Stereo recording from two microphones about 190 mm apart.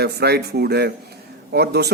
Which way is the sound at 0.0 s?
55° right (ahead or behind).